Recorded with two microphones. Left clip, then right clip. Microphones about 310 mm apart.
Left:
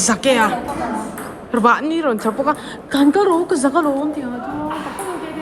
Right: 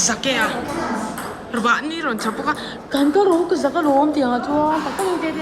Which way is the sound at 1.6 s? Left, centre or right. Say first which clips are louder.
Left 4 dB; centre.